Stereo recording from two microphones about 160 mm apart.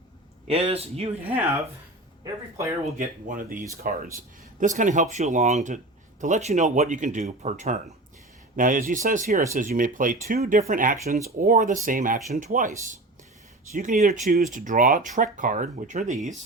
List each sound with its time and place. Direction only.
0.4 s a man's voice: 40° right (ahead or behind)
2.8 s speech: 55° right (ahead or behind)
4.6 s speech: 50° right (ahead or behind)